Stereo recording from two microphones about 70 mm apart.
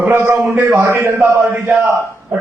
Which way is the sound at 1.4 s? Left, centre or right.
Right.